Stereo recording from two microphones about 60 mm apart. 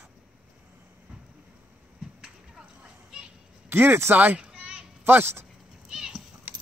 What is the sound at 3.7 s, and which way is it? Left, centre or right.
Speech, right.